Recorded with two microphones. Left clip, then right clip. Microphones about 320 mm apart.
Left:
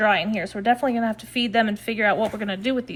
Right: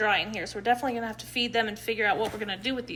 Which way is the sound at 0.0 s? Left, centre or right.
Left.